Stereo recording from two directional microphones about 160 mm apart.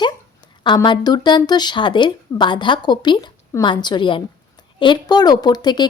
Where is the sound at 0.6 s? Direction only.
30° left (ahead or behind).